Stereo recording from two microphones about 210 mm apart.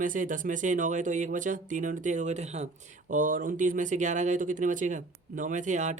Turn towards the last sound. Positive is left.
turn(degrees=-35)  # may be behind; listen again after turning